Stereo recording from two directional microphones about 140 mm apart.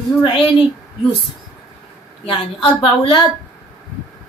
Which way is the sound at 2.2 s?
40° left (ahead or behind).